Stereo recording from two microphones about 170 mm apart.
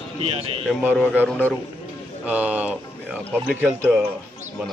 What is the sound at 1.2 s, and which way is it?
Speech, 10° left (ahead or behind).